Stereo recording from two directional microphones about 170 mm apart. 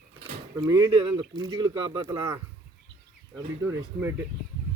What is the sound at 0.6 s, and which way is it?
Speech, 20° right (ahead or behind).